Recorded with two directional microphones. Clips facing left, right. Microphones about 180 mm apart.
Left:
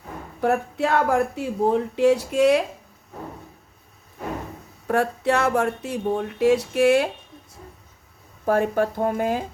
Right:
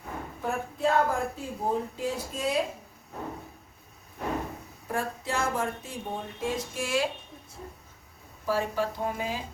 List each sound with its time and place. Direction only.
0.4 s speech: 75° left (ahead or behind)
4.9 s speech: 70° left (ahead or behind)
8.4 s speech: 55° left (ahead or behind)